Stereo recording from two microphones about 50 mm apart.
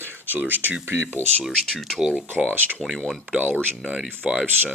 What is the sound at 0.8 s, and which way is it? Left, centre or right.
Speech, right.